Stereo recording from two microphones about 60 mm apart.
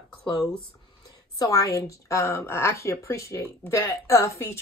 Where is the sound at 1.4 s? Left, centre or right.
Left.